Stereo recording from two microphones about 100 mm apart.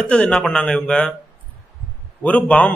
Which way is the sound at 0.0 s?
10° left (ahead or behind).